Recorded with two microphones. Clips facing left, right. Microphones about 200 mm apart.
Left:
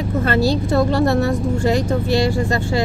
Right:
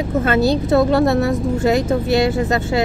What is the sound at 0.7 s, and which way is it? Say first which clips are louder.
Speech: right 3 dB; centre (ahead or behind).